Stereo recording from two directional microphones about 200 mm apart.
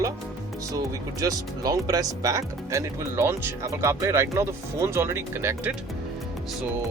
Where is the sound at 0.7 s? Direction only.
15° right (ahead or behind).